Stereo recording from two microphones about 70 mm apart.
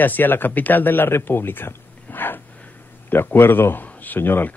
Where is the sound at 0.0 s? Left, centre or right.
Left.